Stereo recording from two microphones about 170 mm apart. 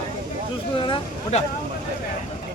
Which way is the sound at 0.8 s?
30° left (ahead or behind).